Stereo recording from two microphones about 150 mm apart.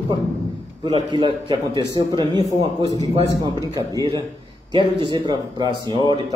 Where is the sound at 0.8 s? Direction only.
30° right (ahead or behind).